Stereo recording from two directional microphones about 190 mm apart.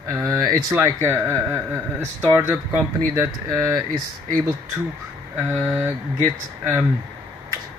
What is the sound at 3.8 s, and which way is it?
Speech, 20° right (ahead or behind).